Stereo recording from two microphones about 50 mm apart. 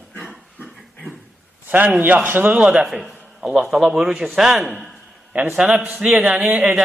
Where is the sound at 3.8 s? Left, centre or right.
Centre.